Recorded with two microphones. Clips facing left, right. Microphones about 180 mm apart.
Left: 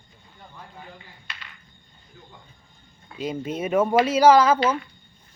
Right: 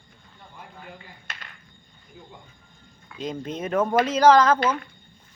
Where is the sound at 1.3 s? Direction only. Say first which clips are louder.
Right 1 dB; 45° right (ahead or behind).